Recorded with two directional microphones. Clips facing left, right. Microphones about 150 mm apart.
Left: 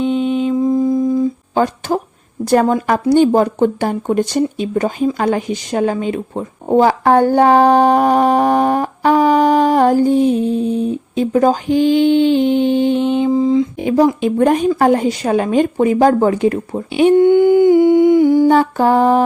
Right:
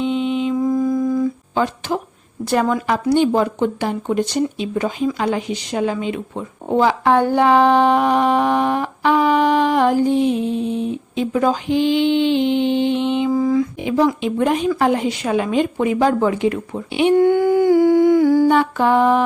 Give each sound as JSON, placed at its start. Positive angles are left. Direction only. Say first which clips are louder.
{"t": 0.0, "sound": "mantra", "louder": "left 3 dB", "side_deg": 45}
{"t": 0.5, "sound": "humming", "louder": "left 4 dB", "side_deg": 25}
{"t": 1.5, "sound": "speech", "louder": "left 5 dB", "side_deg": 45}
{"t": 13.3, "sound": "mantra", "louder": "left 3 dB", "side_deg": 20}
{"t": 13.7, "sound": "speech", "louder": "left 4 dB", "side_deg": 40}
{"t": 17.2, "sound": "humming", "louder": "left 5 dB", "side_deg": 25}
{"t": 18.4, "sound": "speech", "louder": "left 3 dB", "side_deg": 40}